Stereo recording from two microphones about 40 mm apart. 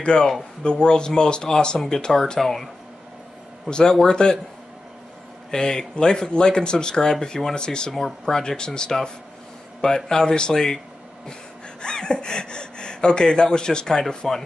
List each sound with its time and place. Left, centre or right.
0.0 s speech: centre
4.1 s speech: centre
5.5 s speech: centre
11.8 s speech: centre